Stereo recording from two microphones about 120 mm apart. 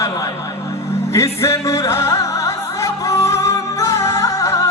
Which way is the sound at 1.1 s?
25° left (ahead or behind).